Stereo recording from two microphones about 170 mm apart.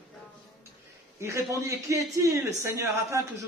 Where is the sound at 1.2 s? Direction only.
15° right (ahead or behind).